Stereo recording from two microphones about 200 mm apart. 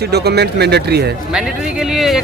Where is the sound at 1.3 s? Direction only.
5° right (ahead or behind).